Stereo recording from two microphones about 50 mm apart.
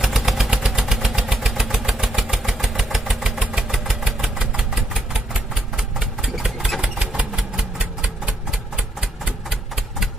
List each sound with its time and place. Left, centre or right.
0.0 s vehicle: centre
6.8 s engine: right
7.3 s a sound: centre